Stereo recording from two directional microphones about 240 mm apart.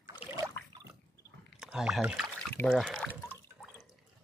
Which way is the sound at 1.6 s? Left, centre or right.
Centre.